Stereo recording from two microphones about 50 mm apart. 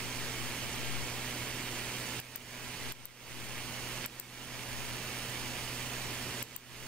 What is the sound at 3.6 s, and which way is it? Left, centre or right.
Vehicle, centre.